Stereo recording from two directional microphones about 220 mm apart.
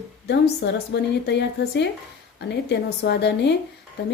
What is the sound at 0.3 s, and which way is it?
Speech, 50° left (ahead or behind).